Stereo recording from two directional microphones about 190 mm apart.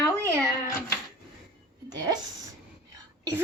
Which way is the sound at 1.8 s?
20° right (ahead or behind).